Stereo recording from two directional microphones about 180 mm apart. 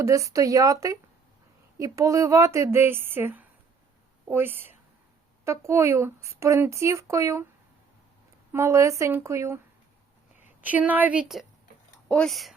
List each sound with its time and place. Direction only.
0.0 s a woman's voice: 15° right (ahead or behind)
8.5 s speech: 15° right (ahead or behind)
10.6 s speech: 10° right (ahead or behind)